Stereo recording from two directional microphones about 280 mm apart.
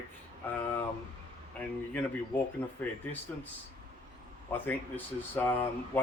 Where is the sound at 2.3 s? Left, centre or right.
Centre.